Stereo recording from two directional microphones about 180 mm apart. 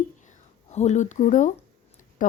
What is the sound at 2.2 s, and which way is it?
Tick-tock, 45° left (ahead or behind).